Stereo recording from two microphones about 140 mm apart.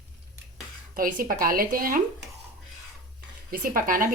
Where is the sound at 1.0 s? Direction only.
75° right (ahead or behind).